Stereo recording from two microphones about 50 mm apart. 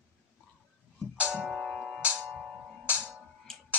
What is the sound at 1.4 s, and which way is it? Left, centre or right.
Music, centre.